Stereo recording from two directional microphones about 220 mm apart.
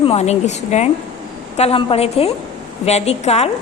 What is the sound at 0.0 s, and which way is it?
A woman's voice, 25° left (ahead or behind).